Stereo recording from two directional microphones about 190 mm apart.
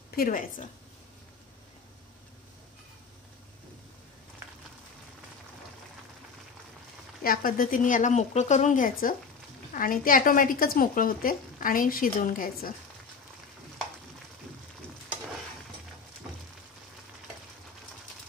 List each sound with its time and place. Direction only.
0.1 s speech: 50° left (ahead or behind)
7.2 s speech: 50° left (ahead or behind)